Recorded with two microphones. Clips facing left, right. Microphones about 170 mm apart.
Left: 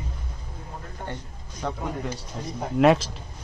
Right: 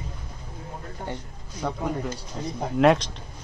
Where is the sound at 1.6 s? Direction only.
10° right (ahead or behind).